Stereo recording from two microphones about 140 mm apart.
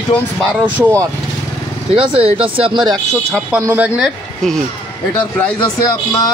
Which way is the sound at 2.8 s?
25° right (ahead or behind).